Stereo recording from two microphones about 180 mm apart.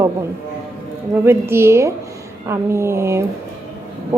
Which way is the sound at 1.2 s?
15° right (ahead or behind).